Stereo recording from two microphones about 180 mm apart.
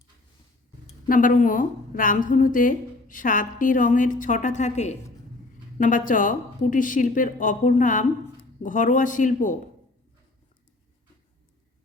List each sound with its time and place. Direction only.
1.0 s a woman's voice: 50° left (ahead or behind)